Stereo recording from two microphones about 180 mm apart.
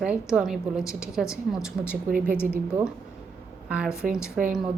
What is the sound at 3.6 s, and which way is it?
Speech, 5° right (ahead or behind).